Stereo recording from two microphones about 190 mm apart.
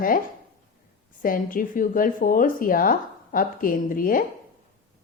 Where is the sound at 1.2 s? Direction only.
45° left (ahead or behind).